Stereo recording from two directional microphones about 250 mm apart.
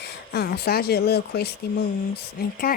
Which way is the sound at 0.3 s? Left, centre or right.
Left.